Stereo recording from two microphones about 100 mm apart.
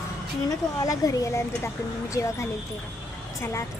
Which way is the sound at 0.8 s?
35° left (ahead or behind).